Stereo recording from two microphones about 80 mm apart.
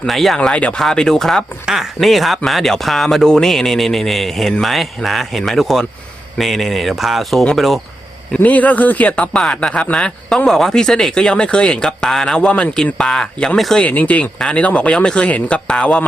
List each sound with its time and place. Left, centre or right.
0.0 s speech: centre
0.3 s speech: centre
8.4 s speech: centre
13.8 s speech: centre